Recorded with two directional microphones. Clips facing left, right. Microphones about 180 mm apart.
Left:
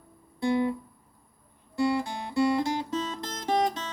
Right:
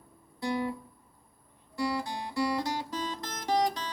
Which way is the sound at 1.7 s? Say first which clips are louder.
Left 5 dB; 25° left (ahead or behind).